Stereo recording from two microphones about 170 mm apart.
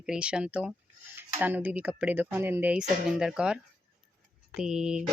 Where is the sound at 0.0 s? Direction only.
5° right (ahead or behind).